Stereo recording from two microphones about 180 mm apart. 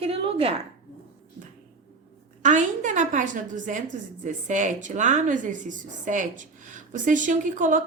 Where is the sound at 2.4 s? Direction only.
45° right (ahead or behind).